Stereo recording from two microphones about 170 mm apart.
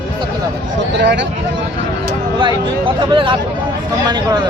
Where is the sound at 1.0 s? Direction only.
90° right.